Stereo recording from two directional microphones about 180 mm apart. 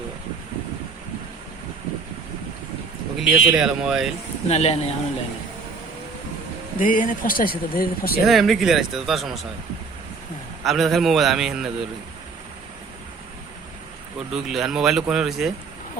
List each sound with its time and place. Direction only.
3.2 s speech: centre (ahead or behind)
4.4 s speech: 35° left (ahead or behind)
6.7 s speech: 50° left (ahead or behind)
8.2 s speech: centre (ahead or behind)
10.6 s speech: centre (ahead or behind)
14.3 s speech: centre (ahead or behind)